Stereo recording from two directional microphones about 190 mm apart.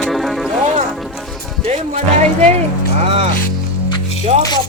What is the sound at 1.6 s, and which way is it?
Music, 35° right (ahead or behind).